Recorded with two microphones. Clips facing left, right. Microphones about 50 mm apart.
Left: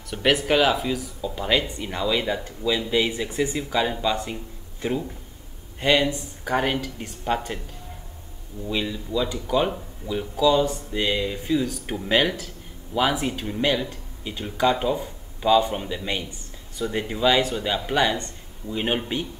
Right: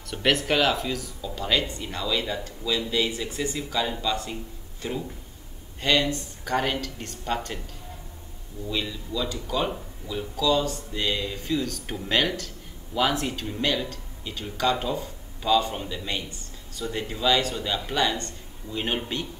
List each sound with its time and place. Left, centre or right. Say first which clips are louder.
0.1 s speech: left 3 dB; centre; by 4.4 s left
5.8 s speech: left 3 dB; centre
8.6 s speech: left 3 dB; centre